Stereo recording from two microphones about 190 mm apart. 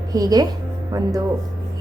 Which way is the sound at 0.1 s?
20° right (ahead or behind).